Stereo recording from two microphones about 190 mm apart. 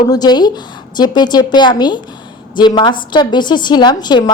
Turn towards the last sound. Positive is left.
turn(degrees=20)  # may be behind; listen again after turning